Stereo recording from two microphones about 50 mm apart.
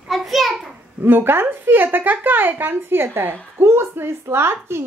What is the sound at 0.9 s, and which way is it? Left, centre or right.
A woman's voice, right.